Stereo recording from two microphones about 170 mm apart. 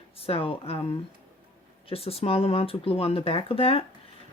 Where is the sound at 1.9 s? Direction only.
35° left (ahead or behind).